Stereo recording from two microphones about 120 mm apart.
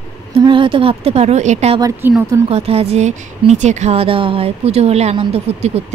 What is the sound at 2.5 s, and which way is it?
Speech, 55° right (ahead or behind).